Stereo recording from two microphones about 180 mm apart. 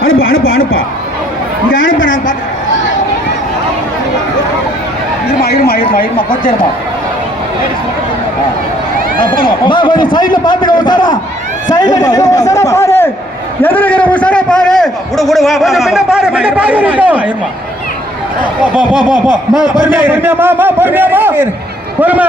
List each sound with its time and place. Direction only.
0.0 s a man's voice: 90° left
1.7 s a man's voice: 50° left (ahead or behind)
5.4 s speech: 60° left (ahead or behind)
9.6 s a man's voice: 25° left (ahead or behind); by 17.3 s 5° right (ahead or behind)
18.7 s a man's voice: 5° right (ahead or behind)
18.9 s a man's voice: 25° left (ahead or behind)
19.8 s a man's voice: 10° right (ahead or behind)